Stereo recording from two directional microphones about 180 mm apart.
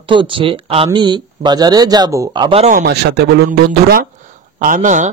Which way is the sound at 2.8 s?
65° right (ahead or behind).